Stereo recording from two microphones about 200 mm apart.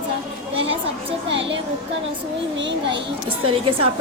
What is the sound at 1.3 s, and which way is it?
A child's voice, 65° right (ahead or behind).